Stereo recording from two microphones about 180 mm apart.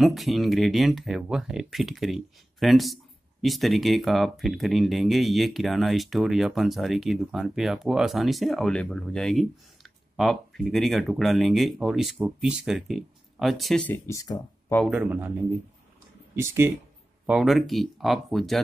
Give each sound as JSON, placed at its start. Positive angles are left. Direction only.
{"t": 0.0, "sound": "speech", "side_deg": 0}
{"t": 14.0, "sound": "speech", "side_deg": 20}
{"t": 14.9, "sound": "speech", "side_deg": -10}
{"t": 16.3, "sound": "speech", "side_deg": -15}
{"t": 17.3, "sound": "speech", "side_deg": 0}